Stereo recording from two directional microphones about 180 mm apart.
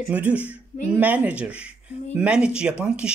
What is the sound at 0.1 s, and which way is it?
Speech, 10° right (ahead or behind).